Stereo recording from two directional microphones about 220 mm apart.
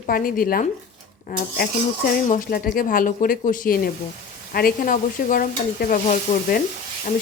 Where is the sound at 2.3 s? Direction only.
40° left (ahead or behind).